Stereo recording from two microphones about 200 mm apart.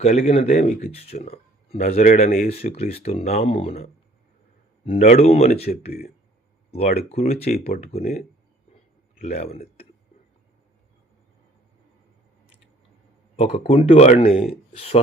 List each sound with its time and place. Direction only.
0.0 s speech: 35° left (ahead or behind)
4.9 s speech: 30° left (ahead or behind)
13.3 s speech: 30° left (ahead or behind)